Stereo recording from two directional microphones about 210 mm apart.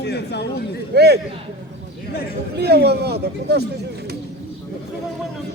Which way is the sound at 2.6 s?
50° right (ahead or behind).